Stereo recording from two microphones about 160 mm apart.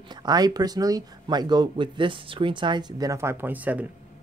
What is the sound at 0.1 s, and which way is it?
Speech, 25° right (ahead or behind).